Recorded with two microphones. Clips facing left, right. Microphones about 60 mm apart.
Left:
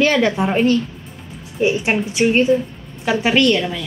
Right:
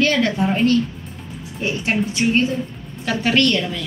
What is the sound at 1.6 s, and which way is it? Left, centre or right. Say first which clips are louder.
A woman's voice: left 4 dB; centre.